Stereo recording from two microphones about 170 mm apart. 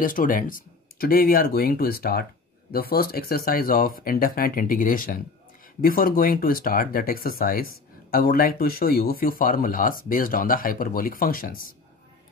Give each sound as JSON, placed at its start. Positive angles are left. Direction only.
{"t": 0.0, "sound": "speech", "side_deg": 55}